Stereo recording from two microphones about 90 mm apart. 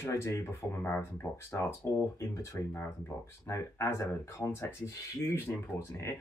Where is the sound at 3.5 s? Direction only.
30° left (ahead or behind).